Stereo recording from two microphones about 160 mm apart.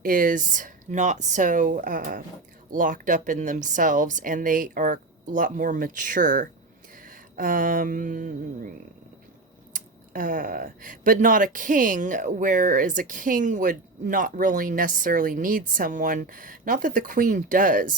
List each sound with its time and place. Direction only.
0.0 s speech: 60° right (ahead or behind)
7.0 s a sound: 60° right (ahead or behind)
9.7 s speech: 60° right (ahead or behind)